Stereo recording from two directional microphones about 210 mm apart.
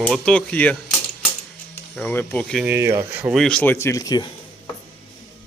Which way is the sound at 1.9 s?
10° left (ahead or behind).